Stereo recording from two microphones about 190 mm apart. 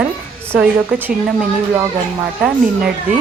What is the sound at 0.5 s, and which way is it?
Speech, 5° right (ahead or behind).